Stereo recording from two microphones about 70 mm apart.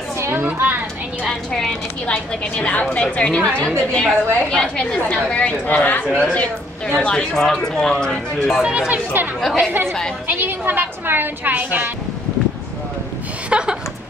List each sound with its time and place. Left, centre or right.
0.2 s a sound: right
1.5 s a woman's voice: centre
2.0 s a woman's voice: left
6.1 s a woman's voice: centre
8.6 s a woman's voice: centre
9.4 s a woman's voice: centre
9.7 s a woman's voice: right
13.5 s a sound: centre